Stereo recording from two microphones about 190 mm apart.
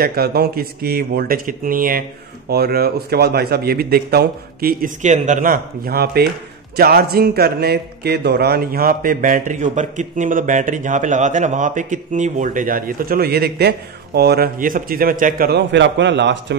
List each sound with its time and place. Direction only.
0.0 s a man's voice: 55° right (ahead or behind)